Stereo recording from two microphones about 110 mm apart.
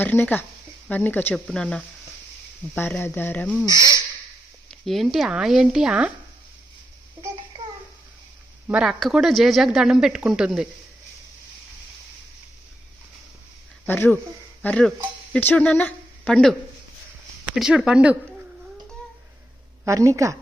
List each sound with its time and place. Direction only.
0.0 s speech: 15° left (ahead or behind)
2.7 s speech: 20° left (ahead or behind)
4.7 s speech: centre (ahead or behind)
8.6 s speech: 10° right (ahead or behind)
8.9 s speech: centre (ahead or behind)
13.8 s speech: 20° left (ahead or behind)
17.5 s speech: 5° right (ahead or behind)
19.8 s a woman's voice: 25° right (ahead or behind)